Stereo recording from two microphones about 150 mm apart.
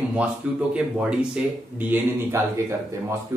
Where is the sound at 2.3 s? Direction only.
15° right (ahead or behind).